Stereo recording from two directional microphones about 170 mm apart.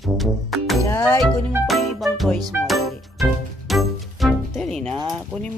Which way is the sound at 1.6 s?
Centre (ahead or behind).